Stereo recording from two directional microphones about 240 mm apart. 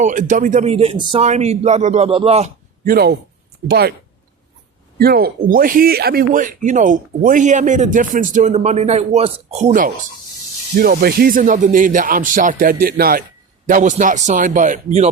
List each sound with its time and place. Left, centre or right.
0.0 s a man's voice: right
4.9 s speech: right